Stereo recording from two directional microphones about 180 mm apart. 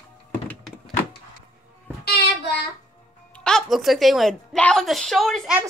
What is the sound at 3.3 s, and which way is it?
A woman's voice, 5° left (ahead or behind).